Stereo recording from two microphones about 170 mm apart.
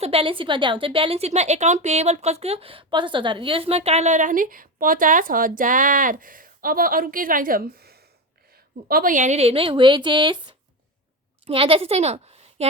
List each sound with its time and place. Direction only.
0.0 s a woman's voice: 35° right (ahead or behind)